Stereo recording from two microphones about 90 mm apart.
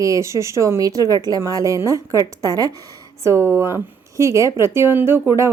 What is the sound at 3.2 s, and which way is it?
Speech, 30° right (ahead or behind).